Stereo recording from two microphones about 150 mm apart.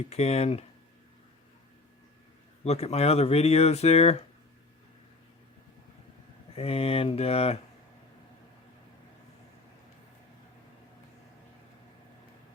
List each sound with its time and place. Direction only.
0.0 s speech: 45° left (ahead or behind)
2.6 s speech: 45° left (ahead or behind)
6.6 s speech: 40° left (ahead or behind)